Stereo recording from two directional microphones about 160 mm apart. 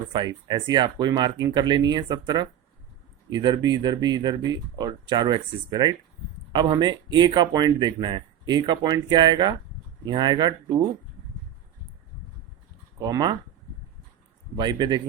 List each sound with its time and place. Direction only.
0.1 s speech: 25° right (ahead or behind)
13.0 s speech: 25° right (ahead or behind)
14.5 s speech: 25° right (ahead or behind)